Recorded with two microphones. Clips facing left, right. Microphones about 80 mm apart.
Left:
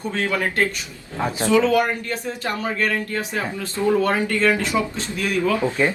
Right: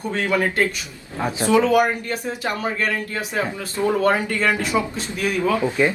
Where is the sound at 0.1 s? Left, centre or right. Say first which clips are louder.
Right 2 dB; right.